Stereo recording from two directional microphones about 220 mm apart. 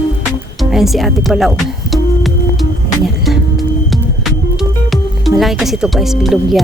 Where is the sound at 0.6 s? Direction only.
Centre (ahead or behind).